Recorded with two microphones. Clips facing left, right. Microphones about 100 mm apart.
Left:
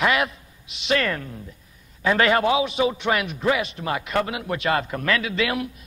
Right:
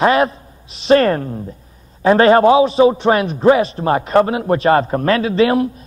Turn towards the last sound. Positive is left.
turn(degrees=-35)  # may be behind; listen again after turning